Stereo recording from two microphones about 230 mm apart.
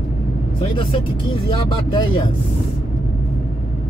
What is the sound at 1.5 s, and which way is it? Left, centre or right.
Speech, left.